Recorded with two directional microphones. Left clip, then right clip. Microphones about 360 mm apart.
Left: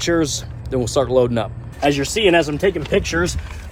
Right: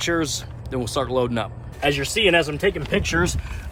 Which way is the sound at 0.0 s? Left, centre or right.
Centre.